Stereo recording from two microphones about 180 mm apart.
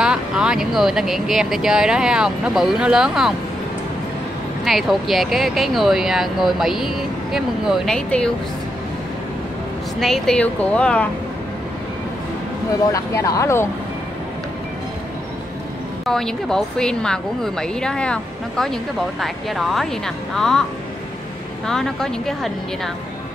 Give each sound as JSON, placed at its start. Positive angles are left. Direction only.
{"t": 0.0, "sound": "speech", "side_deg": -5}
{"t": 4.6, "sound": "speech", "side_deg": 0}
{"t": 9.9, "sound": "speech", "side_deg": 0}
{"t": 12.9, "sound": "speech", "side_deg": 20}
{"t": 16.1, "sound": "speech", "side_deg": 0}
{"t": 21.6, "sound": "speech", "side_deg": 5}